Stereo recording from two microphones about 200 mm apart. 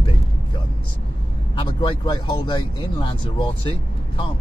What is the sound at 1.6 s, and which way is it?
Speech, 25° left (ahead or behind).